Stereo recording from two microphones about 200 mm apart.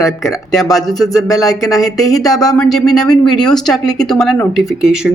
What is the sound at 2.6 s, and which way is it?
Speech, centre (ahead or behind).